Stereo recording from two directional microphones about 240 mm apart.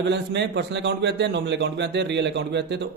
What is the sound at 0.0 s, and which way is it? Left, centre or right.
A man's voice, right.